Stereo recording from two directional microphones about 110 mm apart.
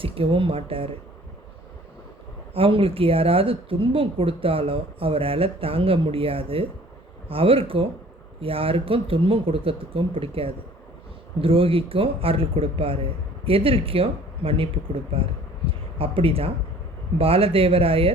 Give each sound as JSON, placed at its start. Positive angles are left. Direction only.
{"t": 0.0, "sound": "speech", "side_deg": -55}
{"t": 2.5, "sound": "speech", "side_deg": -55}